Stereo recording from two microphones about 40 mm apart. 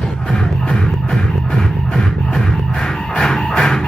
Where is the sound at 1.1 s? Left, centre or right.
Centre.